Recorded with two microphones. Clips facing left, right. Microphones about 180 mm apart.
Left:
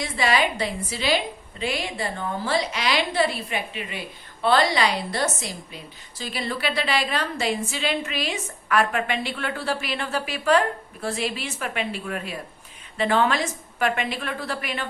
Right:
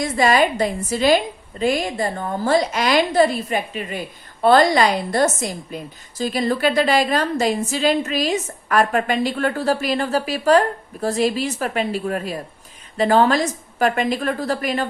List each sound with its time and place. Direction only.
0.0 s a woman's voice: 45° right (ahead or behind)